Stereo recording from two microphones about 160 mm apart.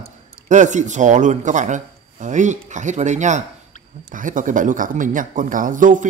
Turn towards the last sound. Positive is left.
turn(degrees=-55)  # may be behind; listen again after turning